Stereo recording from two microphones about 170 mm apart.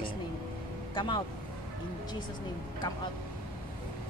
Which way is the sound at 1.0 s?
25° left (ahead or behind).